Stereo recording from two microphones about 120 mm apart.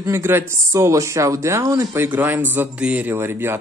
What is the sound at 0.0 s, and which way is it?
Speech, 20° right (ahead or behind).